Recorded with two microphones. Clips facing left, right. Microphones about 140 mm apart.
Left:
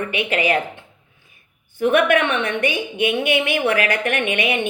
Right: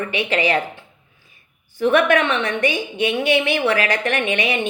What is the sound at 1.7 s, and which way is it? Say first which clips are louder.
A woman's voice: even; 55° left (ahead or behind).